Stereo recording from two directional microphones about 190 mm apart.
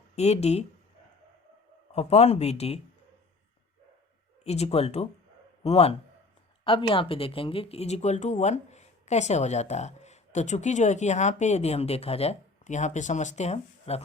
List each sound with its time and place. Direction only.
0.2 s speech: 35° left (ahead or behind)
1.9 s speech: 35° left (ahead or behind)
4.4 s speech: 35° left (ahead or behind)